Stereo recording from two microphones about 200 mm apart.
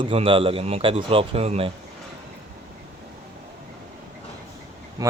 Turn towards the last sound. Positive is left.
turn(degrees=-20)  # may be behind; listen again after turning